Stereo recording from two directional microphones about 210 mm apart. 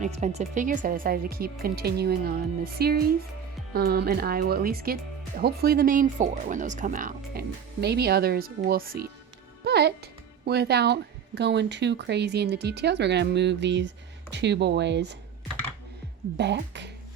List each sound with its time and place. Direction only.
0.0 s speech: 30° right (ahead or behind)
9.6 s music: 50° right (ahead or behind)
10.4 s speech: 50° right (ahead or behind)
16.4 s speech: 55° right (ahead or behind)